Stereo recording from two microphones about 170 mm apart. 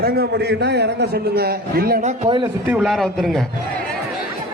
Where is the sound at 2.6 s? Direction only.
5° right (ahead or behind).